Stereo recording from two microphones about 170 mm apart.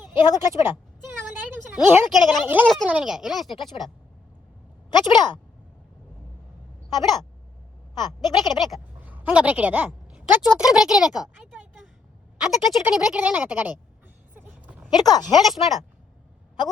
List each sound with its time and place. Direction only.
0.2 s speech: 25° left (ahead or behind)
1.4 s a woman's voice: 10° right (ahead or behind)
4.9 s speech: 25° left (ahead or behind)
6.9 s speech: 25° left (ahead or behind)
9.0 s a sound: 10° right (ahead or behind)
10.5 s speech: centre (ahead or behind)
12.8 s speech: 5° right (ahead or behind)
14.3 s a sound: 10° right (ahead or behind)
14.8 s speech: 25° left (ahead or behind)
15.4 s speech: centre (ahead or behind)